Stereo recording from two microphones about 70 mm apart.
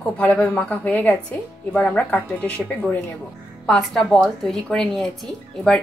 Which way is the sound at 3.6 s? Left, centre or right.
Centre.